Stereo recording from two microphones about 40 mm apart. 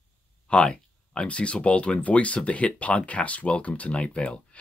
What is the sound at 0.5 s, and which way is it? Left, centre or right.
Speech, left.